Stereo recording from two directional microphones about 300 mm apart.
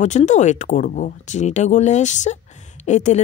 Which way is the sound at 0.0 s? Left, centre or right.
Left.